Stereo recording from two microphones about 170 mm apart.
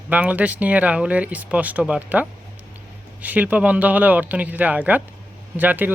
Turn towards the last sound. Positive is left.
turn(degrees=-10)  # may be behind; listen again after turning